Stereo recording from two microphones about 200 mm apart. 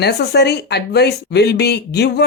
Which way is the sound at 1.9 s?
55° left (ahead or behind).